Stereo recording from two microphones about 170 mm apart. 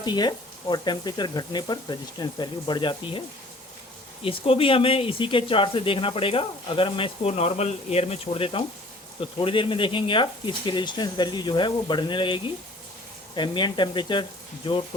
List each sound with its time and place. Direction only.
0.0 s speech: 25° left (ahead or behind)